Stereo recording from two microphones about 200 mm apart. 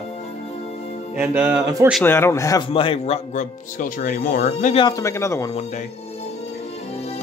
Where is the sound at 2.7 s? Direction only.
25° left (ahead or behind).